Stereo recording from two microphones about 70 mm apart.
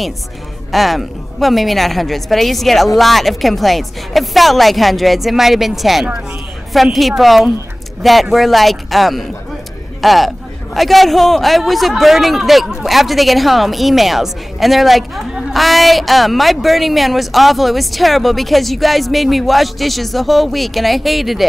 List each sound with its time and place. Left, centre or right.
0.7 s a man's voice: centre